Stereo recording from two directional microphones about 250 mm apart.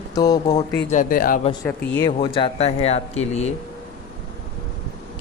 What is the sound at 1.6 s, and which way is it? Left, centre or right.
Speech, centre.